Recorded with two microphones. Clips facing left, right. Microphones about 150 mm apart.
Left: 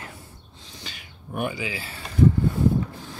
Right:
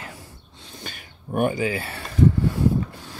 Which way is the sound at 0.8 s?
50° right (ahead or behind).